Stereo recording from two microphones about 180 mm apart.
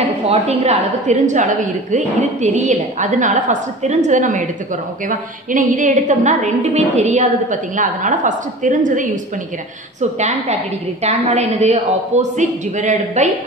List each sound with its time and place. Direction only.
0.3 s a woman's voice: 35° right (ahead or behind)
11.0 s a man's voice: 35° right (ahead or behind)